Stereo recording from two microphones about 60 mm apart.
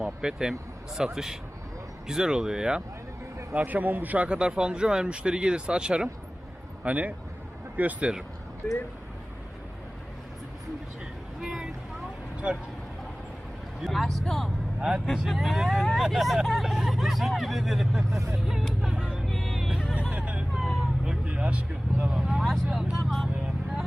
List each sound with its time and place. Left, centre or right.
0.0 s a man's voice: centre
3.5 s a man's voice: right
11.3 s speech: centre
13.8 s speech: centre
18.4 s music: centre
19.3 s music: centre
19.6 s hubbub: centre
20.6 s vehicle: centre
22.1 s vehicle: centre
22.6 s speech: centre